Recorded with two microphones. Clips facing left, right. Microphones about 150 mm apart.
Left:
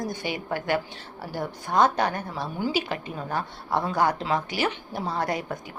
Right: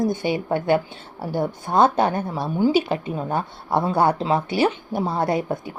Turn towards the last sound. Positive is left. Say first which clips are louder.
# right 6 dB
turn(degrees=-25)  # may be behind; listen again after turning